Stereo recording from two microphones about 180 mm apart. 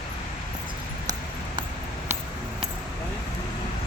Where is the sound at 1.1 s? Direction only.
20° right (ahead or behind).